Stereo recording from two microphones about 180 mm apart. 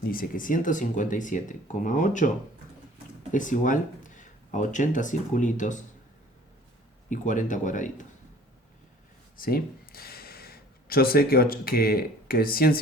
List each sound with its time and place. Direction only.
0.0 s speech: 50° left (ahead or behind)
3.3 s speech: 45° left (ahead or behind)
7.1 s speech: 45° left (ahead or behind)
9.4 s speech: 55° left (ahead or behind)